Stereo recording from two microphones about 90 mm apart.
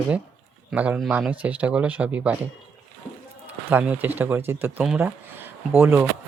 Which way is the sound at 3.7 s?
15° right (ahead or behind).